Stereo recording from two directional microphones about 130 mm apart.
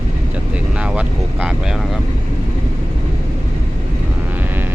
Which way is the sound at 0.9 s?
10° right (ahead or behind).